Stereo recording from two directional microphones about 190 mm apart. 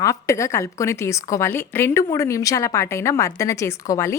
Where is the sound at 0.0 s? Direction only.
15° left (ahead or behind).